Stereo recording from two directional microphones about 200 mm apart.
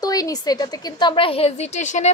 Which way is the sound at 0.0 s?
20° left (ahead or behind).